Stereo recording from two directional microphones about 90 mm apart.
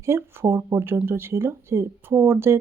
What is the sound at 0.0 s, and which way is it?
Speech, 30° right (ahead or behind).